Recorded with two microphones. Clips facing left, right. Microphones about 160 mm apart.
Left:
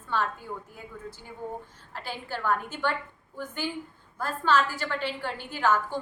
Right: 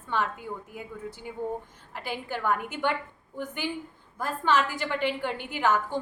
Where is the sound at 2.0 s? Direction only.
15° right (ahead or behind).